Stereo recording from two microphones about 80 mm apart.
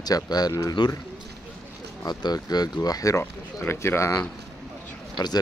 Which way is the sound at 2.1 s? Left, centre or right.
Left.